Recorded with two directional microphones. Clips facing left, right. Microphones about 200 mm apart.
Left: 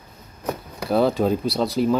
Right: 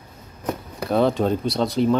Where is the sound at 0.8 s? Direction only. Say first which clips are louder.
Even; centre (ahead or behind).